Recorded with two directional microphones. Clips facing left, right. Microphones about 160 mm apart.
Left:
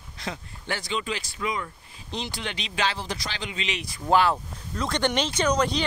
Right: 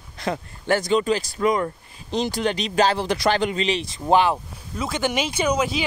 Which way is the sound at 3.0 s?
65° right (ahead or behind).